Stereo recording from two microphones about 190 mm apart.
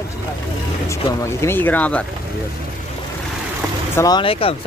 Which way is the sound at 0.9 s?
15° left (ahead or behind).